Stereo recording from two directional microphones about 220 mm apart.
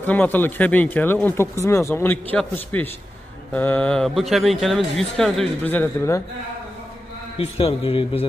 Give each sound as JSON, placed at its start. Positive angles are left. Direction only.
{"t": 0.0, "sound": "speech", "side_deg": 5}
{"t": 7.3, "sound": "a man's voice", "side_deg": 25}